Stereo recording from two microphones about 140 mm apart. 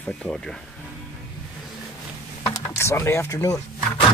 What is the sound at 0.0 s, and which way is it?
Speech, 5° left (ahead or behind).